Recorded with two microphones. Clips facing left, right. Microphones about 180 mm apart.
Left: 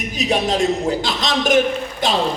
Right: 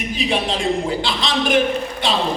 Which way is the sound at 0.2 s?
45° left (ahead or behind).